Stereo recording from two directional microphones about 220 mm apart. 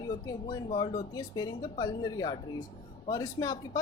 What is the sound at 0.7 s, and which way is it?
A woman's voice, 25° left (ahead or behind).